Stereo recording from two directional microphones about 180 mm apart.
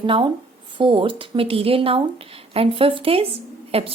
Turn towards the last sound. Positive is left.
turn(degrees=-35)  # may be behind; listen again after turning